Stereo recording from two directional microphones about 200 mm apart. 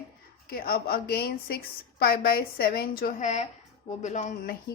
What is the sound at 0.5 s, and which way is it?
A woman's voice, 50° left (ahead or behind).